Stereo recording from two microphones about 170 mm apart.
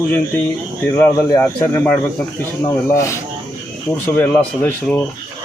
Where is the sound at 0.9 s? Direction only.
10° left (ahead or behind).